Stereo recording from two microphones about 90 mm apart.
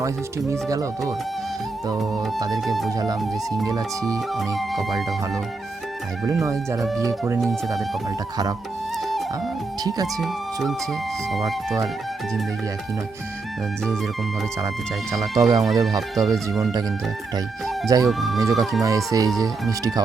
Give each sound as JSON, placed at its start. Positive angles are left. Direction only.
{"t": 0.5, "sound": "speech", "side_deg": -35}
{"t": 2.6, "sound": "speech", "side_deg": 0}
{"t": 3.7, "sound": "speech", "side_deg": -40}
{"t": 4.4, "sound": "speech", "side_deg": 0}
{"t": 6.4, "sound": "speech", "side_deg": -35}
{"t": 7.4, "sound": "speech", "side_deg": 0}
{"t": 10.2, "sound": "speech", "side_deg": 0}
{"t": 15.4, "sound": "speech", "side_deg": -40}
{"t": 16.0, "sound": "speech", "side_deg": 0}
{"t": 17.8, "sound": "speech", "side_deg": -40}
{"t": 18.1, "sound": "speech", "side_deg": 0}
{"t": 18.8, "sound": "speech", "side_deg": -40}